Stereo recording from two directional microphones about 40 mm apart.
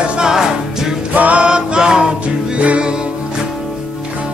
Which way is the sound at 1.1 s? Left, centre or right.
Right.